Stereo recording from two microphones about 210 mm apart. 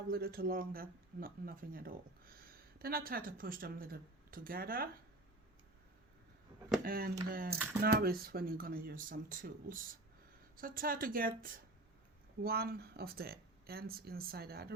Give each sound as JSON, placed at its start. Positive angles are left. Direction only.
{"t": 0.1, "sound": "speech", "side_deg": -45}
{"t": 6.8, "sound": "speech", "side_deg": -45}